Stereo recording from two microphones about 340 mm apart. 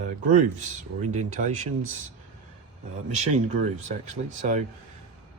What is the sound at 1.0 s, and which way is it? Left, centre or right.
Speech, right.